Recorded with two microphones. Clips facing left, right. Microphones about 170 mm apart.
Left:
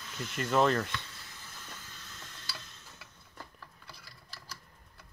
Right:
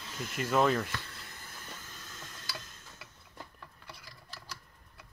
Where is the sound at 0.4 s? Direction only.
5° right (ahead or behind).